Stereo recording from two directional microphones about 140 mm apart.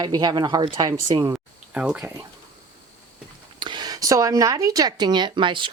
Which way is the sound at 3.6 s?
30° right (ahead or behind).